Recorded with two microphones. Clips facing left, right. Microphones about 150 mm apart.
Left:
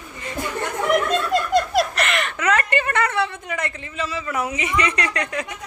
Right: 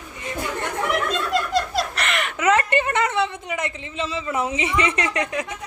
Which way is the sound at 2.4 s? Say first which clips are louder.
Right 3 dB; 20° right (ahead or behind).